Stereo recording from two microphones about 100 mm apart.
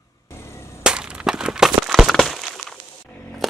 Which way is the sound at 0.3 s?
25° left (ahead or behind).